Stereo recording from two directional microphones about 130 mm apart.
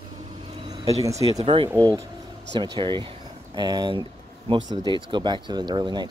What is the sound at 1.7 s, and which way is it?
Speech, 25° right (ahead or behind).